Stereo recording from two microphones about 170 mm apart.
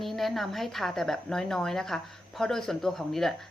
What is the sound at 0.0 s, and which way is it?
A woman's voice, centre (ahead or behind).